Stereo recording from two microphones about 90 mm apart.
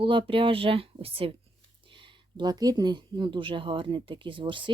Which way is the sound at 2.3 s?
50° right (ahead or behind).